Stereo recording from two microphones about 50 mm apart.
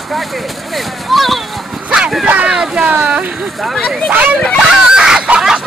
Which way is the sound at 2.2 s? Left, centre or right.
Right.